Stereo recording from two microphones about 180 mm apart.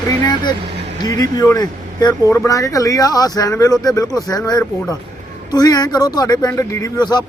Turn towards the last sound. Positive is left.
turn(degrees=25)  # may be behind; listen again after turning